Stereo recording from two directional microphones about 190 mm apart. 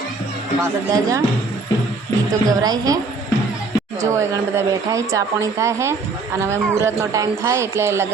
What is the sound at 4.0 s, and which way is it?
A man's voice, 15° right (ahead or behind).